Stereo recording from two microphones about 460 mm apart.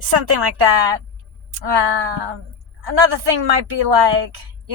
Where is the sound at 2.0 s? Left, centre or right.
Right.